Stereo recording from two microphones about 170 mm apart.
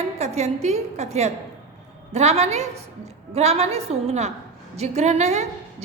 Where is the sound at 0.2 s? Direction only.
40° right (ahead or behind).